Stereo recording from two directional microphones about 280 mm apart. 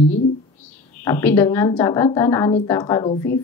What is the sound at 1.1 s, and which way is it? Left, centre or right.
A woman's voice, centre.